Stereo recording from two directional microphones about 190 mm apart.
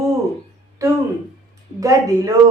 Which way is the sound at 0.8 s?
15° right (ahead or behind).